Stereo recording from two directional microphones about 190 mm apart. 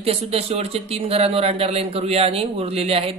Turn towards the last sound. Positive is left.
turn(degrees=-30)  # may be behind; listen again after turning